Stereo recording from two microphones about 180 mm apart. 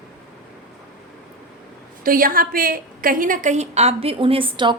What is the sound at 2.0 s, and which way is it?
A woman's voice, 50° right (ahead or behind).